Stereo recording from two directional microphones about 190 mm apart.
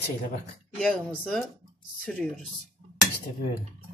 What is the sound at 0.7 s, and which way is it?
Speech, 5° left (ahead or behind).